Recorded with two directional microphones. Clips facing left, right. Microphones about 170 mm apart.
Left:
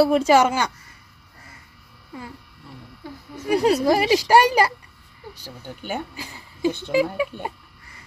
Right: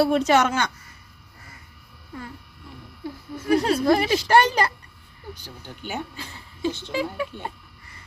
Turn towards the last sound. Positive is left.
turn(degrees=10)  # may be behind; listen again after turning